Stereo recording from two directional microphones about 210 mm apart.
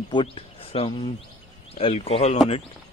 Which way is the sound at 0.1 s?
25° left (ahead or behind).